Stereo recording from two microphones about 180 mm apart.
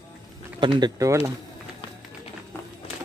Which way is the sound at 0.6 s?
25° right (ahead or behind).